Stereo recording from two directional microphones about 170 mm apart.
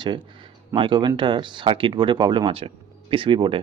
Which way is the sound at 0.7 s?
30° right (ahead or behind).